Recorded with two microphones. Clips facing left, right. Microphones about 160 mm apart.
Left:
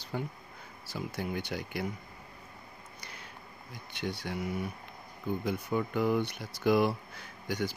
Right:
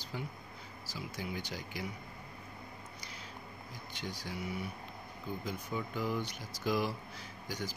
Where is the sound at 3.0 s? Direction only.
60° left (ahead or behind).